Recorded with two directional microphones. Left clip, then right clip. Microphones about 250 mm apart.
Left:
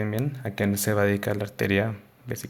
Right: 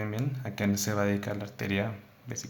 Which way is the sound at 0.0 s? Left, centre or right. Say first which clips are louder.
Left 6 dB; left.